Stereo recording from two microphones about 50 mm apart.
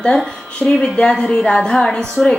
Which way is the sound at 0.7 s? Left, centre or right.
Left.